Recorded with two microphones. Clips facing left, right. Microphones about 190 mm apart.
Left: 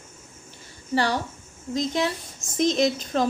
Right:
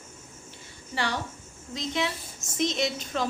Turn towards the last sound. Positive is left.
turn(degrees=40)  # may be behind; listen again after turning